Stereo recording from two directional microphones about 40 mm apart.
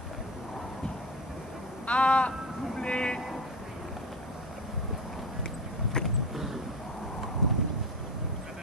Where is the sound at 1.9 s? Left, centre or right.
Left.